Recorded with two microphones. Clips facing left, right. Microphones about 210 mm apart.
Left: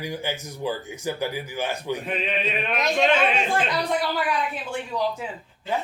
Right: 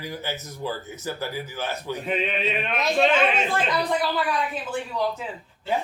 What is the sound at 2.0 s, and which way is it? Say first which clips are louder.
Speech: right 1 dB; centre (ahead or behind).